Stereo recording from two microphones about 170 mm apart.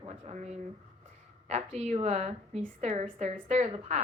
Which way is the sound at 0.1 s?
45° right (ahead or behind).